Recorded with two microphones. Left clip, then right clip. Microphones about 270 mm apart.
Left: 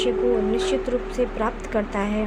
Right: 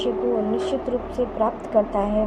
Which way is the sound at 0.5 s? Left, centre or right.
Left.